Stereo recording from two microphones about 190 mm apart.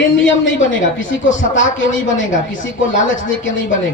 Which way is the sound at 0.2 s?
80° left.